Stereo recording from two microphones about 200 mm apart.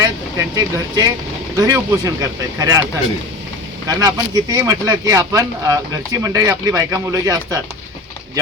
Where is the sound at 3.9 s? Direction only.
20° right (ahead or behind).